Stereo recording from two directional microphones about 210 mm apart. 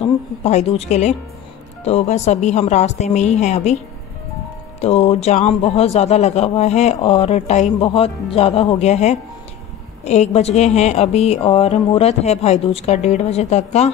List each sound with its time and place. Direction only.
0.4 s speech: 30° left (ahead or behind)
4.7 s speech: 30° left (ahead or behind)